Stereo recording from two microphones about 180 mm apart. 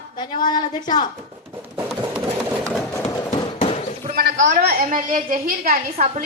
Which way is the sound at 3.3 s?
30° left (ahead or behind).